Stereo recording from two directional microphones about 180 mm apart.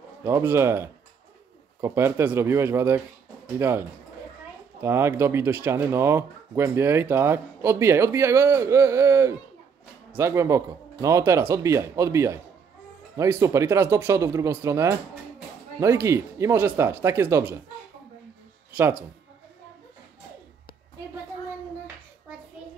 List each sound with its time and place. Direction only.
0.2 s speech: 15° right (ahead or behind)
4.8 s speech: 15° right (ahead or behind)
18.8 s speech: 10° right (ahead or behind)